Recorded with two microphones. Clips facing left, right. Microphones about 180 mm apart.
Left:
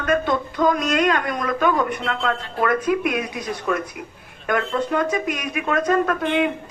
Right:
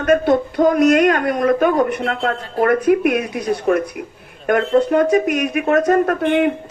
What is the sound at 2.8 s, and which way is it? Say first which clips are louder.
Speech: right 6 dB; 55° right (ahead or behind).